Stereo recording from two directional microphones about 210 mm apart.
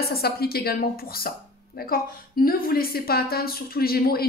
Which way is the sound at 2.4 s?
45° left (ahead or behind).